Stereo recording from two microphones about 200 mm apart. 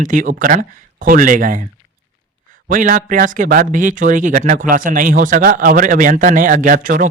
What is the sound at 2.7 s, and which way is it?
Speech, 40° right (ahead or behind).